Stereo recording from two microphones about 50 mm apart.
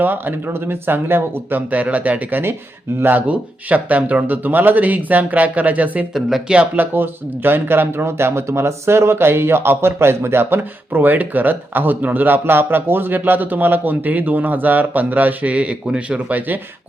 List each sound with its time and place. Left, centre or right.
0.0 s speech: right
6.7 s speech: right